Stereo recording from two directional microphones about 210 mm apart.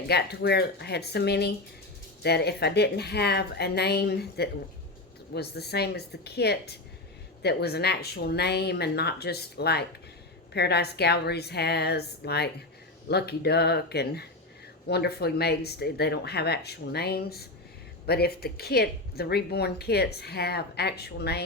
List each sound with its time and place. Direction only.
0.1 s speech: 50° left (ahead or behind)